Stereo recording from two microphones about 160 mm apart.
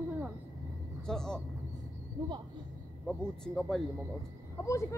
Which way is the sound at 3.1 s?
5° left (ahead or behind).